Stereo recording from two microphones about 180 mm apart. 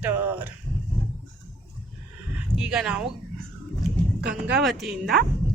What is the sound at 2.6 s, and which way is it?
Speech, 5° right (ahead or behind).